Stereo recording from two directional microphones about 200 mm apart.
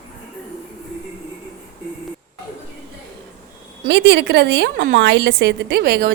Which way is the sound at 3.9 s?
60° right (ahead or behind).